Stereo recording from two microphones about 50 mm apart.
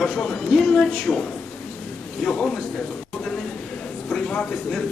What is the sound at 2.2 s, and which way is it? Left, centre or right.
Speech, centre.